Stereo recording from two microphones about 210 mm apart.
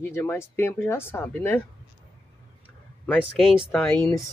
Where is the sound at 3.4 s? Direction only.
Centre (ahead or behind).